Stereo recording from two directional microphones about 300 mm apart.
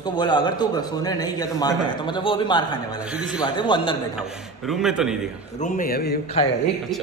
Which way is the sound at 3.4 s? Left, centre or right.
Centre.